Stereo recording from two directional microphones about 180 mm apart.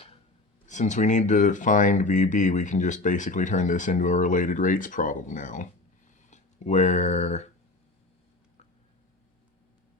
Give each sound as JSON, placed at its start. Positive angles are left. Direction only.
{"t": 0.7, "sound": "speech", "side_deg": 40}